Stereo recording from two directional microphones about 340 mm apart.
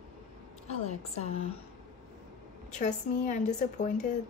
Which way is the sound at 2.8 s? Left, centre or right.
Left.